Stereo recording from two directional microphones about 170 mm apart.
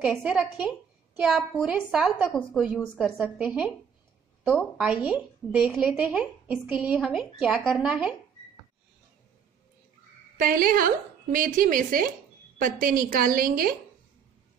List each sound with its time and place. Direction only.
0.1 s a woman's voice: 5° right (ahead or behind)
10.4 s a woman's voice: 55° right (ahead or behind)